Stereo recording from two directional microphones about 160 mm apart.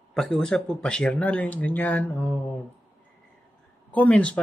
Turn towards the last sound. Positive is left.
turn(degrees=10)  # may be behind; listen again after turning